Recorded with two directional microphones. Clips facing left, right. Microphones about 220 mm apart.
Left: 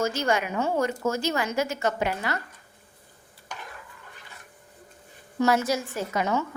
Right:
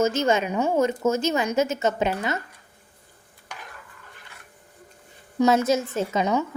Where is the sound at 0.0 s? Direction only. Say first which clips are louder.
Right 4 dB; 20° right (ahead or behind).